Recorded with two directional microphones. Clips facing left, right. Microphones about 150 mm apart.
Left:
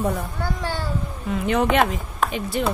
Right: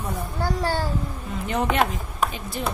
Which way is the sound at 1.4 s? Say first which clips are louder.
Left 4 dB; 80° left.